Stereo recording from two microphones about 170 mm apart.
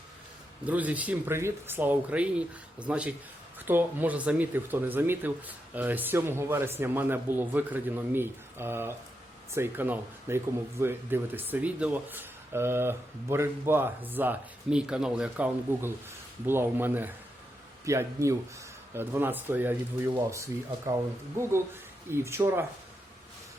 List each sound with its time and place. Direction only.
0.6 s speech: 10° right (ahead or behind)